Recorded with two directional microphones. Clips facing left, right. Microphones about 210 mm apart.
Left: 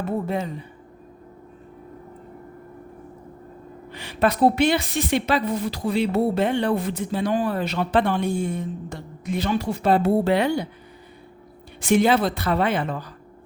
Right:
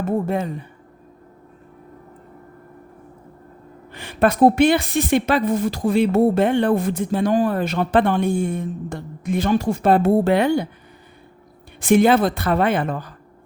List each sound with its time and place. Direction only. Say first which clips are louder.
0.0 s speech: right 4 dB; 50° right (ahead or behind)
3.9 s speech: right 4 dB; 50° right (ahead or behind)
11.8 s speech: right 4 dB; 50° right (ahead or behind)